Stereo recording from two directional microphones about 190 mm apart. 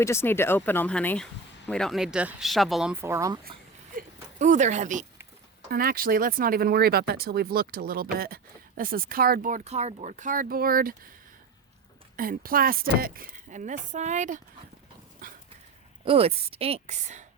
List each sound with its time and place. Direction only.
0.0 s speech: 15° left (ahead or behind)
2.9 s speech: 15° right (ahead or behind)
3.9 s a sound: 40° right (ahead or behind)
5.7 s speech: 50° right (ahead or behind)
12.1 s speech: 50° right (ahead or behind)
15.2 s dog: 50° right (ahead or behind)
16.0 s a woman's voice: 30° right (ahead or behind)